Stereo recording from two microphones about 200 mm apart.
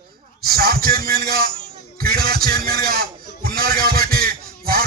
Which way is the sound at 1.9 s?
50° right (ahead or behind).